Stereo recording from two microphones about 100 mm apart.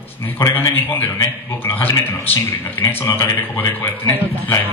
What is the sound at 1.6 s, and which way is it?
Speech, 20° left (ahead or behind).